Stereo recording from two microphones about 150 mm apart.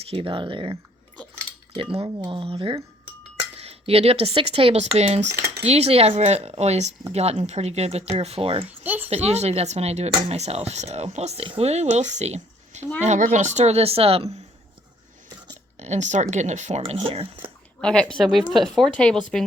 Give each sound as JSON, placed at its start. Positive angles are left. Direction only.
{"t": 0.0, "sound": "speech", "side_deg": -40}
{"t": 8.6, "sound": "a sound", "side_deg": -10}
{"t": 9.0, "sound": "speech", "side_deg": -45}
{"t": 15.8, "sound": "speech", "side_deg": -50}
{"t": 16.8, "sound": "speech", "side_deg": -40}
{"t": 17.7, "sound": "speech", "side_deg": 5}